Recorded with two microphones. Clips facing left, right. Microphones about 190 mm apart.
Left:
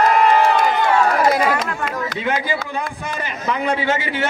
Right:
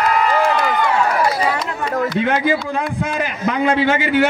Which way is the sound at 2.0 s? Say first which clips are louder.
Right 7 dB; 55° right (ahead or behind).